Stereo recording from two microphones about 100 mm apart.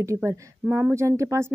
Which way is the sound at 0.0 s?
30° right (ahead or behind).